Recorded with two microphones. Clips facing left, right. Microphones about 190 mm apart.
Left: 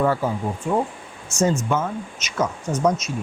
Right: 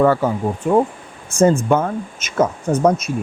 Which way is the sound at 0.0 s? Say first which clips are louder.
Right 6 dB; 75° right (ahead or behind).